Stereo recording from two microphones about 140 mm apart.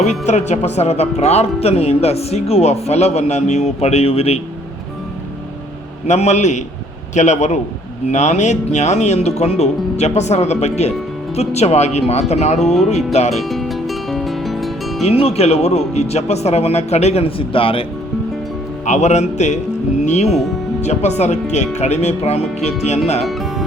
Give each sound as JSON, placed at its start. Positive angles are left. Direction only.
{"t": 0.0, "sound": "speech", "side_deg": 55}
{"t": 6.1, "sound": "a man's voice", "side_deg": 55}
{"t": 13.4, "sound": "music", "side_deg": 0}
{"t": 15.0, "sound": "speech", "side_deg": 45}
{"t": 18.9, "sound": "speech", "side_deg": 55}